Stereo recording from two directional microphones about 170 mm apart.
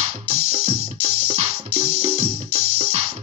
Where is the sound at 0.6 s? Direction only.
40° right (ahead or behind).